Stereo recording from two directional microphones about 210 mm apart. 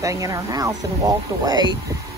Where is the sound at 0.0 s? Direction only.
15° right (ahead or behind).